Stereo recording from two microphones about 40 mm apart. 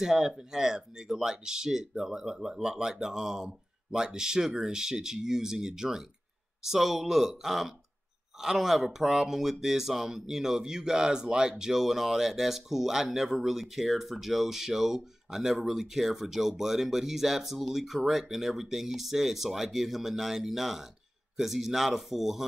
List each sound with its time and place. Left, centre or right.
0.0 s speech: centre